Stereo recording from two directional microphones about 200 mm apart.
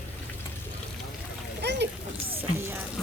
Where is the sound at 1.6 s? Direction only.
55° right (ahead or behind).